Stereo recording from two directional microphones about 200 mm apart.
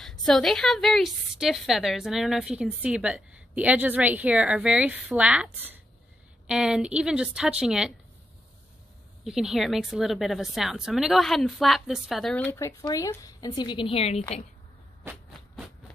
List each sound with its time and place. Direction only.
0.0 s a woman's voice: centre (ahead or behind)
9.2 s a woman's voice: centre (ahead or behind)
12.8 s a woman's voice: 15° left (ahead or behind)